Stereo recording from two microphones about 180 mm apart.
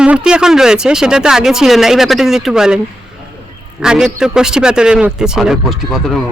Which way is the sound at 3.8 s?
5° right (ahead or behind).